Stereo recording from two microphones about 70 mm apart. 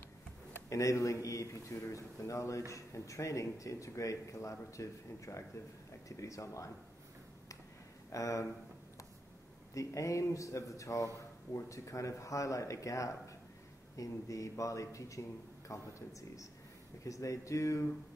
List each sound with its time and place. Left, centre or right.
0.7 s speech: left
8.1 s speech: left
9.8 s speech: left